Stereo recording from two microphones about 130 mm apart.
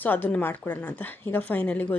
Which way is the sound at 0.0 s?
15° left (ahead or behind).